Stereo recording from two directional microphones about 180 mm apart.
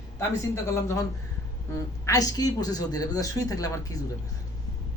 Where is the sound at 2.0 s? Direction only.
20° left (ahead or behind).